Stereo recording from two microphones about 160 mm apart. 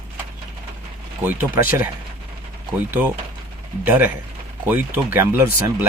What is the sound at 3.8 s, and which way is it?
Speech, 10° right (ahead or behind).